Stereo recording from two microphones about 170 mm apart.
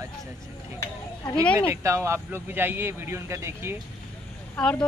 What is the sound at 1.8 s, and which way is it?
A man's voice, 15° right (ahead or behind).